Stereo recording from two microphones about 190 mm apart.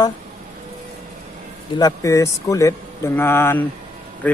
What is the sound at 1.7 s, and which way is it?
Speech, 15° left (ahead or behind).